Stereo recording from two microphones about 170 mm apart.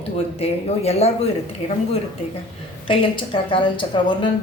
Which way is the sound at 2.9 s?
30° left (ahead or behind).